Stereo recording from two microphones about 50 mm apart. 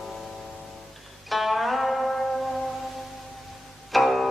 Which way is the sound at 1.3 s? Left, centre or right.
Centre.